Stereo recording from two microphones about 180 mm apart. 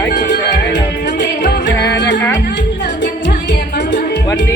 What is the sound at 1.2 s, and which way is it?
Music, 75° left (ahead or behind).